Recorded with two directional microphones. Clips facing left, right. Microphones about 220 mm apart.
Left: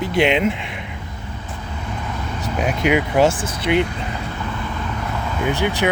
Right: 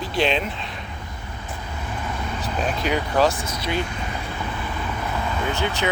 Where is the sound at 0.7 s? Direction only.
15° left (ahead or behind).